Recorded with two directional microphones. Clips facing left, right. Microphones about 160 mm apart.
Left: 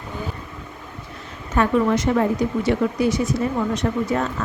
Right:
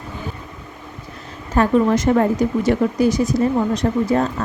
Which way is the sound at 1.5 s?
35° right (ahead or behind).